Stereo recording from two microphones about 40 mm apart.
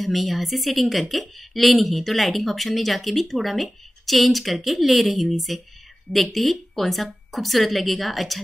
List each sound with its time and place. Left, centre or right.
0.0 s speech: centre